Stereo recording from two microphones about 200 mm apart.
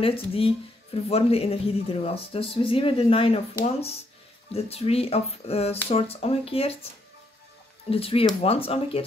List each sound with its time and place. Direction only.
0.0 s speech: 30° left (ahead or behind)
7.9 s speech: 30° left (ahead or behind)